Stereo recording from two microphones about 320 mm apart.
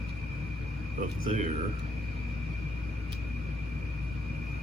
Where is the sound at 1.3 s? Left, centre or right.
Centre.